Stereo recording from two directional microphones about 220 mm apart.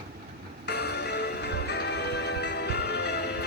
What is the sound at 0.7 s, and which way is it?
Music, 50° left (ahead or behind).